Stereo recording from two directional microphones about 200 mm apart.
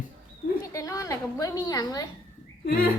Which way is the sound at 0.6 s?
15° left (ahead or behind).